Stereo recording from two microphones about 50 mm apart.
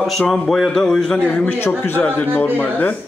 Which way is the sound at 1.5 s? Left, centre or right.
Left.